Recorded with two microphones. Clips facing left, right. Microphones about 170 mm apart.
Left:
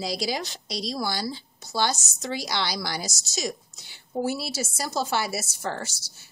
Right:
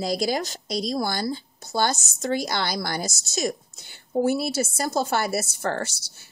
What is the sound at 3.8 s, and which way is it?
Speech, 55° right (ahead or behind).